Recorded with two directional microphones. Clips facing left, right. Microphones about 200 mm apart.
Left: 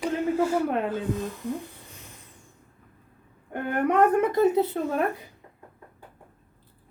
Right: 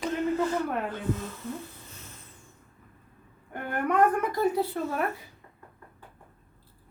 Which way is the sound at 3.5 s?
20° left (ahead or behind).